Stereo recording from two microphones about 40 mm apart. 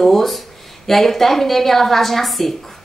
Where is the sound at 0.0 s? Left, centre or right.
Centre.